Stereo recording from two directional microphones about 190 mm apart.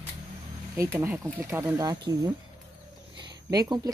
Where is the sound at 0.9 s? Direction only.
10° right (ahead or behind).